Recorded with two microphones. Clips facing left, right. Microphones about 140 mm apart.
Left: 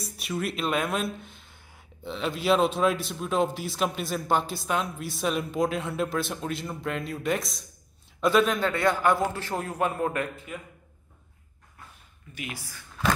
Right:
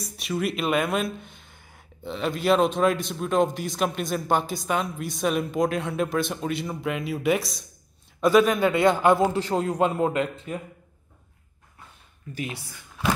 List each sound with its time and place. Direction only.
0.0 s a man's voice: centre (ahead or behind); by 10.5 s 25° right (ahead or behind)
12.4 s a man's voice: 25° right (ahead or behind)